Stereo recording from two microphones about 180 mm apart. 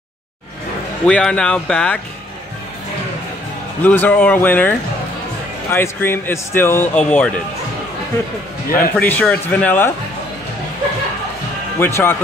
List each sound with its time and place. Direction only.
1.0 s speech: 5° left (ahead or behind)
3.8 s a man's voice: 10° left (ahead or behind)
8.6 s speech: 50° left (ahead or behind)
8.9 s a man's voice: 10° left (ahead or behind)
11.8 s a man's voice: 10° left (ahead or behind)